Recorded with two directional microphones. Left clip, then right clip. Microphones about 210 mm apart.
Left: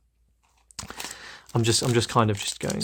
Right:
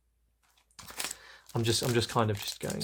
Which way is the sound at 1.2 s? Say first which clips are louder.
Left 7 dB; 30° left (ahead or behind).